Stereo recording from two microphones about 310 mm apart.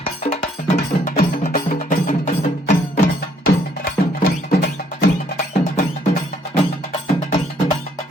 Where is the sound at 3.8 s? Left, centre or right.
Left.